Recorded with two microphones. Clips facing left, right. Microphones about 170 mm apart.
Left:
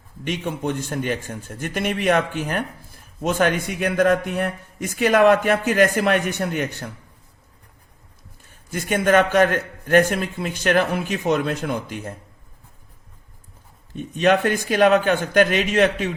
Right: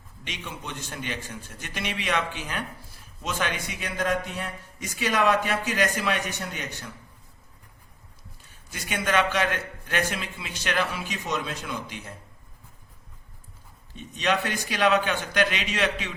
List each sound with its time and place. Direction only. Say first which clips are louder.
0.3 s a man's voice: left 13 dB; 50° left (ahead or behind)
8.4 s a man's voice: left 10 dB; 50° left (ahead or behind)
13.9 s a man's voice: left 8 dB; 50° left (ahead or behind)